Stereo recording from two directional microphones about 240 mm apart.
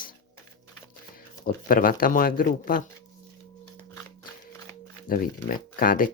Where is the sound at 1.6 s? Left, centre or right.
Left.